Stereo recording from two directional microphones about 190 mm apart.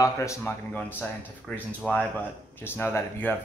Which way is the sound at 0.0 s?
15° left (ahead or behind).